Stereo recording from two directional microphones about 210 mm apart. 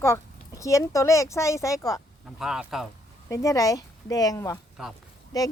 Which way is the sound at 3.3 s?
15° left (ahead or behind).